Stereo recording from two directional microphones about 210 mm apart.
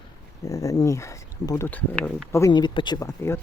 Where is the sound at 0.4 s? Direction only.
15° left (ahead or behind).